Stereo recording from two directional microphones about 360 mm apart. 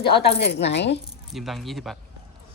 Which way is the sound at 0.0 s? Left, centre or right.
Left.